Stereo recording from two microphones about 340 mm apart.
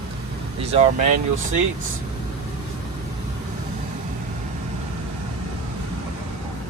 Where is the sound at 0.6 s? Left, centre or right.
Centre.